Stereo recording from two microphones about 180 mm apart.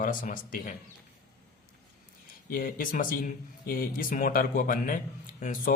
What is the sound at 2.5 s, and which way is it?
Speech, 50° left (ahead or behind).